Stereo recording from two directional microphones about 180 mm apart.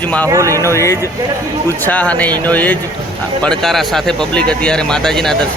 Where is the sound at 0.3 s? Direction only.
15° right (ahead or behind).